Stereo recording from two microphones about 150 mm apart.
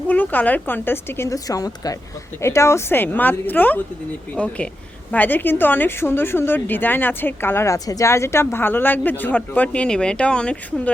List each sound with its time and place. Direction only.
0.1 s a woman's voice: 10° left (ahead or behind)